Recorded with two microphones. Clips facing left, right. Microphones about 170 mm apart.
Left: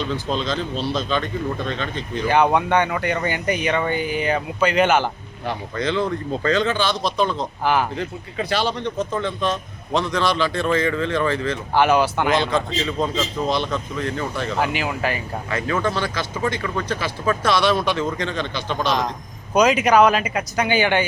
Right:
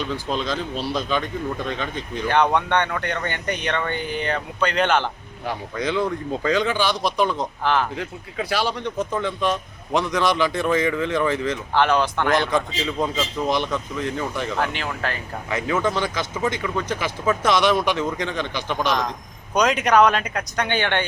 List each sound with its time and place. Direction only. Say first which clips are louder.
0.0 s speech: left 1 dB; 10° right (ahead or behind)
2.2 s speech: left 2 dB; 5° left (ahead or behind)
5.5 s speech: left 1 dB; 10° right (ahead or behind)
7.6 s a man's voice: left 2 dB; 10° left (ahead or behind)
7.9 s speech: left 2 dB; 5° right (ahead or behind)
11.7 s a man's voice: left 3 dB; 10° left (ahead or behind)
12.5 s speech: left 1 dB; 15° right (ahead or behind)
14.5 s a man's voice: left 3 dB; 10° left (ahead or behind)
15.4 s speech: right 1 dB; 15° right (ahead or behind)
19.5 s speech: left 2 dB; centre (ahead or behind)